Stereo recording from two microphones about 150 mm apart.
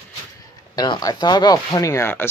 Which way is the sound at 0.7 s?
30° left (ahead or behind).